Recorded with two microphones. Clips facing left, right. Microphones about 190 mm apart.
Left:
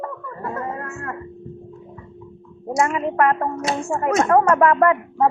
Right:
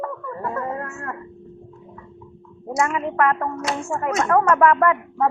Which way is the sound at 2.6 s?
20° left (ahead or behind).